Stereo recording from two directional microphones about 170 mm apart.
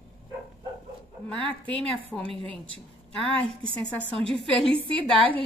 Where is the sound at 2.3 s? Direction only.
30° right (ahead or behind).